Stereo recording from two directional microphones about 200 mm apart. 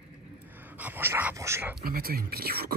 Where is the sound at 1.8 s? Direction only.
50° right (ahead or behind).